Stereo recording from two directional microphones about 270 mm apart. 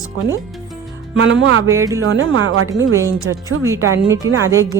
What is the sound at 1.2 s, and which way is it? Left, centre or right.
Speech, right.